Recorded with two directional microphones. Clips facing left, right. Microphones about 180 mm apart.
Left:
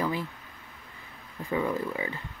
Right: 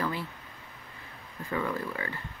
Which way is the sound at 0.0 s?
15° left (ahead or behind).